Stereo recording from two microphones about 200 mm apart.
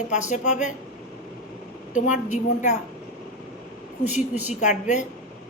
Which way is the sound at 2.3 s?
35° left (ahead or behind).